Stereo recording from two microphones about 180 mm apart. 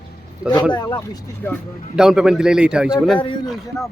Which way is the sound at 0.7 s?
20° left (ahead or behind).